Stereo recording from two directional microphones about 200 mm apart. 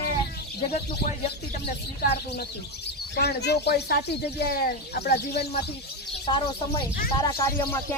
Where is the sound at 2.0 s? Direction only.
55° left (ahead or behind).